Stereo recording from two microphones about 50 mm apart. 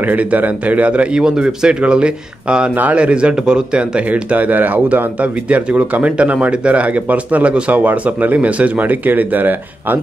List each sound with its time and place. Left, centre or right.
0.0 s speech: right
1.2 s speech: centre; by 9.9 s right